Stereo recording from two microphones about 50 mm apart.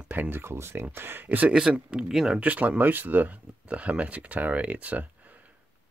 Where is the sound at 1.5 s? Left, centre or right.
Centre.